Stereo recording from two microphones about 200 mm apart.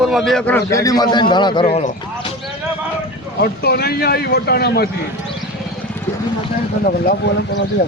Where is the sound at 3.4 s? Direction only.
55° left (ahead or behind).